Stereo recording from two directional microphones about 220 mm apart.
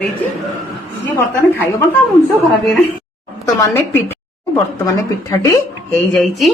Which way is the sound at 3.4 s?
10° left (ahead or behind).